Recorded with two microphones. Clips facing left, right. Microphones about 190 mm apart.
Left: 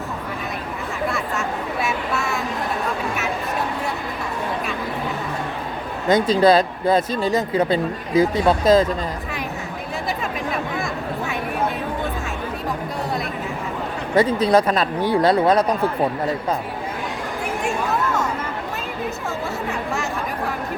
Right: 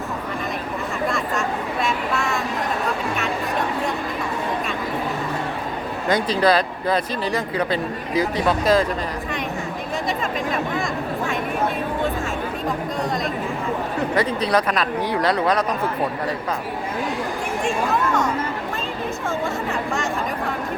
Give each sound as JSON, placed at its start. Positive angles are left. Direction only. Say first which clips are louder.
{"t": 1.1, "sound": "a sound", "louder": "right 1 dB", "side_deg": 5}
{"t": 6.1, "sound": "speech", "louder": "left 4 dB", "side_deg": 25}
{"t": 14.2, "sound": "speech", "louder": "left 6 dB", "side_deg": 25}